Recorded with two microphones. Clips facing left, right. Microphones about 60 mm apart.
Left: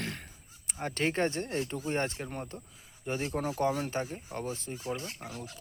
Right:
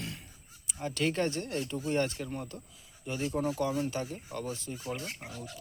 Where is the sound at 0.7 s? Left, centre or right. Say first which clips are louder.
Even; left.